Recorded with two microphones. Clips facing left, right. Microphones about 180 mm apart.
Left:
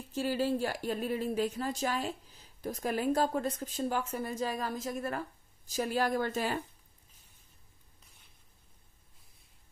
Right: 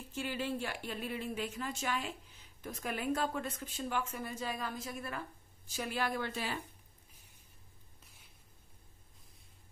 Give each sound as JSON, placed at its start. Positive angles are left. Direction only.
{"t": 0.1, "sound": "speech", "side_deg": 35}